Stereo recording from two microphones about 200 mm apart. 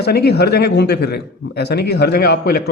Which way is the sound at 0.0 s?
55° left (ahead or behind).